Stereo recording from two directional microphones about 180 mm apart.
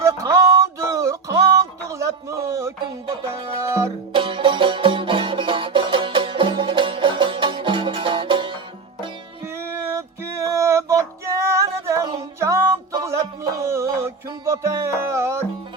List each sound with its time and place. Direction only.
0.0 s music: 15° right (ahead or behind)
2.5 s music: 15° right (ahead or behind)
4.1 s music: 30° right (ahead or behind)
9.6 s a sound: 15° right (ahead or behind)
12.4 s music: 15° right (ahead or behind)
13.6 s a sound: 15° right (ahead or behind)
14.5 s music: 15° right (ahead or behind)